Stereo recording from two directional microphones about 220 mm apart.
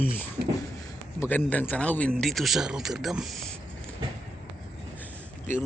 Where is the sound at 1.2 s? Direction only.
10° left (ahead or behind).